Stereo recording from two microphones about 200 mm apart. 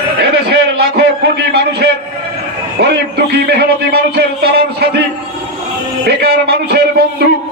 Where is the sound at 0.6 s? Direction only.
55° right (ahead or behind).